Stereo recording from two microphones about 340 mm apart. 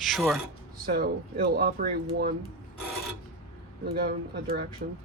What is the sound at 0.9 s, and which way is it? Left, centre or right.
Speech, right.